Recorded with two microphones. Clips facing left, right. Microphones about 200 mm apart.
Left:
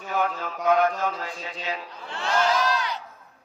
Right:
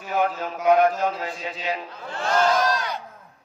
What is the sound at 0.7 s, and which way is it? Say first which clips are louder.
Speech: right 4 dB; 35° right (ahead or behind).